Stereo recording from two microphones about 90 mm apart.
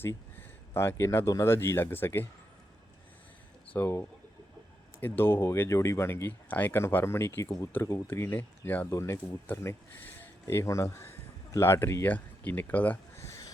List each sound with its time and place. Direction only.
0.0 s a sound: 25° left (ahead or behind)
1.5 s speech: 30° left (ahead or behind)
3.7 s speech: 25° left (ahead or behind)
4.9 s speech: 25° left (ahead or behind)
8.9 s speech: 35° left (ahead or behind)
9.1 s speech: 20° left (ahead or behind)